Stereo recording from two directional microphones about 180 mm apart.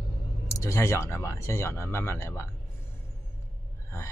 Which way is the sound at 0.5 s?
15° left (ahead or behind).